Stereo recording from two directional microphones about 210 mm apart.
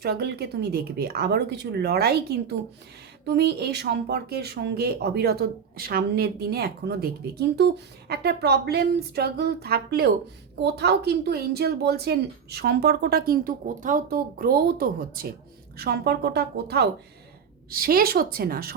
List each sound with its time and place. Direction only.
0.0 s speech: 50° right (ahead or behind)